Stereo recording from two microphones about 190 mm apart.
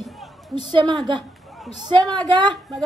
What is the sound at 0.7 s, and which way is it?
Speech, 25° right (ahead or behind).